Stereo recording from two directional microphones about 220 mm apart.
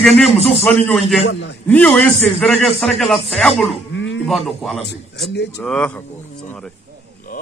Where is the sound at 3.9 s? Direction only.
60° left (ahead or behind).